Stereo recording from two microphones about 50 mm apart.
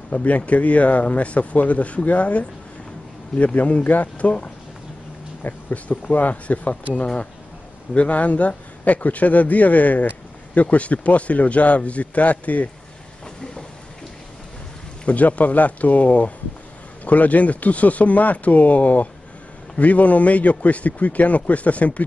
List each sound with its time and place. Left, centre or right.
0.1 s a man's voice: left
15.0 s a man's voice: left